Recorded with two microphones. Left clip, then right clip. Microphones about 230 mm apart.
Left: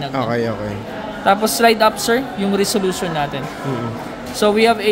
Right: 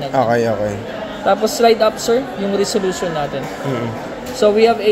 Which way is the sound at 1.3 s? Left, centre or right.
Left.